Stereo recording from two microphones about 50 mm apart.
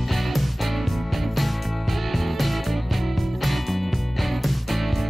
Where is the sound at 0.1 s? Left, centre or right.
Centre.